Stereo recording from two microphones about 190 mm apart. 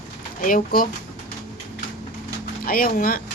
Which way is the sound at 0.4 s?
45° left (ahead or behind).